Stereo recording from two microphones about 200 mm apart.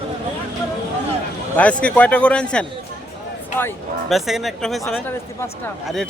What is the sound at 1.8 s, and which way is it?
Speech, 5° left (ahead or behind).